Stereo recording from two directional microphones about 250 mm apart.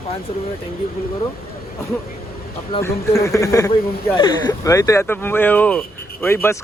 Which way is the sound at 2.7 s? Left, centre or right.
Centre.